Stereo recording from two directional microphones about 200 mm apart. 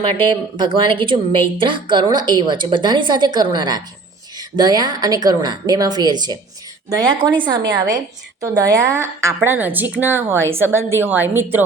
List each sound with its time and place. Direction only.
0.0 s a woman's voice: 25° right (ahead or behind); by 11.6 s 10° right (ahead or behind)